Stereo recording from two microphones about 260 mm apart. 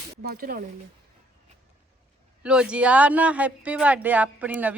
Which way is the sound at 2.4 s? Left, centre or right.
Centre.